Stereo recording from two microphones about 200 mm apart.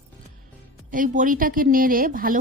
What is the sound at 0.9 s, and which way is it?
A woman's voice, 40° right (ahead or behind).